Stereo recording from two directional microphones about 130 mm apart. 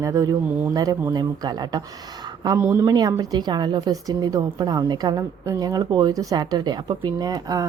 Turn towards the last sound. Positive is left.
turn(degrees=-30)  # may be behind; listen again after turning